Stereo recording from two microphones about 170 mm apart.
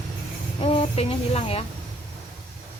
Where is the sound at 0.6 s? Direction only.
35° left (ahead or behind).